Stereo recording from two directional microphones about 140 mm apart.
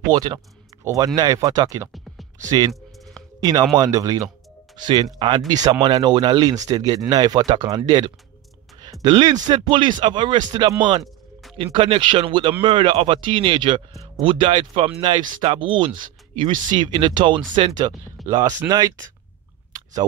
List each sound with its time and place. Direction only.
0.1 s speech: 30° right (ahead or behind)
2.7 s a sound: centre (ahead or behind)
3.3 s speech: 25° right (ahead or behind)
9.0 s speech: 30° right (ahead or behind)